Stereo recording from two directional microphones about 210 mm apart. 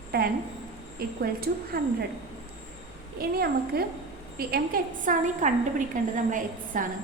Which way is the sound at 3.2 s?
45° right (ahead or behind).